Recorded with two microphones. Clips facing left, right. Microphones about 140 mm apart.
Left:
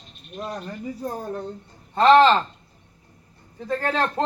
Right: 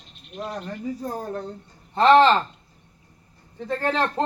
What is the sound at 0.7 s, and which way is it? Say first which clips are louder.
Speech: right 1 dB; 5° left (ahead or behind).